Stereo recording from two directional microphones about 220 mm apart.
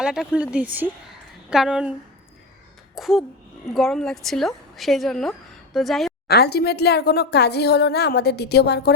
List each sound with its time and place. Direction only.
0.0 s speech: 5° right (ahead or behind)
6.2 s speech: 45° left (ahead or behind)